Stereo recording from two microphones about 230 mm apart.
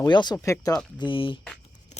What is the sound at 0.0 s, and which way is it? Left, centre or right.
Speech, centre.